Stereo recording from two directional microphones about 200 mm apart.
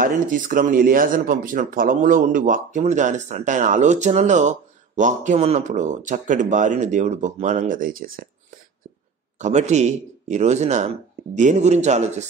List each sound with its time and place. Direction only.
0.0 s speech: 45° right (ahead or behind)
9.4 s speech: 35° right (ahead or behind)